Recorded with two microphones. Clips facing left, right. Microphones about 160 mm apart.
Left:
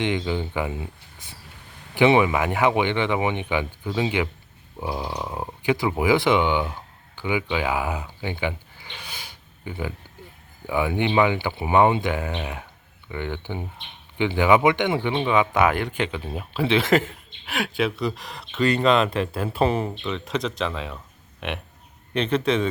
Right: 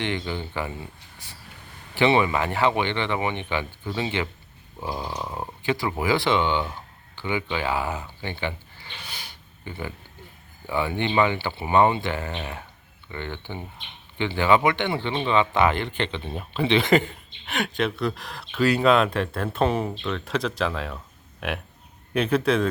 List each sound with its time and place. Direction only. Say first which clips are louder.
0.0 s speech: left 4 dB; 15° left (ahead or behind)
2.0 s speech: left 3 dB; 15° left (ahead or behind)
9.0 s a sound: left 1 dB; 10° left (ahead or behind)
10.7 s speech: left 3 dB; 15° left (ahead or behind)